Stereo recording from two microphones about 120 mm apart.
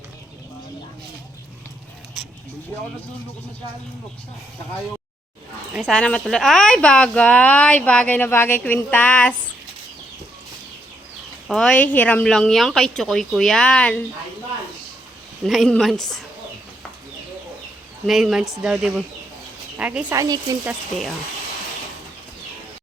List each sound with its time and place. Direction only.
5.8 s speech: 5° left (ahead or behind)
11.4 s a woman's voice: 5° left (ahead or behind)
15.4 s a woman's voice: centre (ahead or behind)
18.0 s a woman's voice: 5° right (ahead or behind)
20.1 s speech: 30° right (ahead or behind)